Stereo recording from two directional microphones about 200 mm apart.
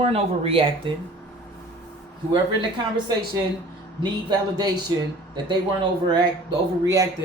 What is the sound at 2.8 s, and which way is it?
A woman's voice, 20° right (ahead or behind).